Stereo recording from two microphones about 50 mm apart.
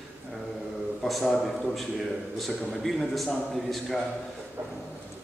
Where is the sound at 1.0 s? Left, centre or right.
Centre.